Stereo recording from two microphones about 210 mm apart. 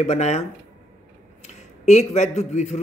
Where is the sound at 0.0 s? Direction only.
30° left (ahead or behind).